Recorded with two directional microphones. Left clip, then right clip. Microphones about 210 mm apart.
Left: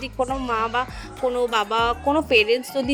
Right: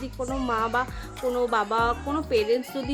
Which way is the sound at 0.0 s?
25° left (ahead or behind).